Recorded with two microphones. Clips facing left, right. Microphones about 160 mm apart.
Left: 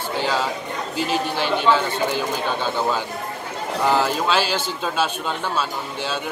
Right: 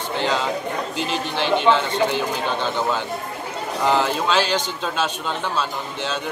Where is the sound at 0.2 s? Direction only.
10° left (ahead or behind).